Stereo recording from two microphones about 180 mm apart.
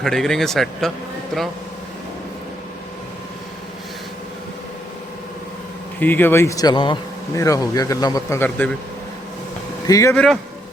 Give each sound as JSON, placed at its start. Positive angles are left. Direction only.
{"t": 0.0, "sound": "a man's voice", "side_deg": 5}
{"t": 6.0, "sound": "speech", "side_deg": 10}
{"t": 9.8, "sound": "speech", "side_deg": 20}